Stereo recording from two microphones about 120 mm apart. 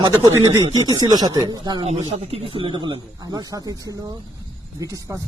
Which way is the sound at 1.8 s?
60° right (ahead or behind).